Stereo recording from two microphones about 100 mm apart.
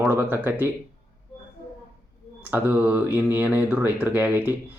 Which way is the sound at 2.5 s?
20° right (ahead or behind).